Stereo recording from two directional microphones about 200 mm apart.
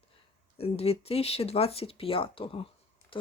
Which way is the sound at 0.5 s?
30° left (ahead or behind).